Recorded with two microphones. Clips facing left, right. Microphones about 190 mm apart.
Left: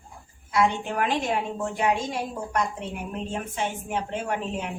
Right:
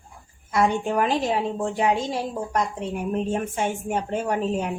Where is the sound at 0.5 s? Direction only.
40° right (ahead or behind).